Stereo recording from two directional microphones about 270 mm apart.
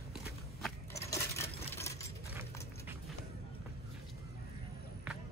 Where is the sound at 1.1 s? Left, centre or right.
Centre.